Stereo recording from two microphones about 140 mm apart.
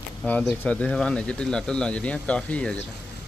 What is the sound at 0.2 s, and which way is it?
Speech, 5° left (ahead or behind).